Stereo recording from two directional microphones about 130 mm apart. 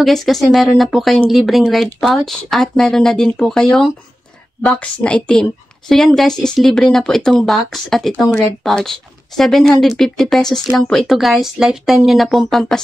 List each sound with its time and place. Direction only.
0.0 s speech: centre (ahead or behind)